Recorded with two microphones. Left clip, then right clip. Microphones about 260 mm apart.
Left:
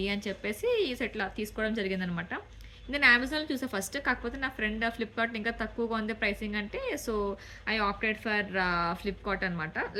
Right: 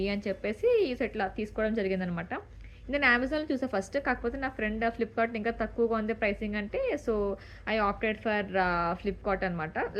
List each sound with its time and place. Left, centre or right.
0.0 s a woman's voice: left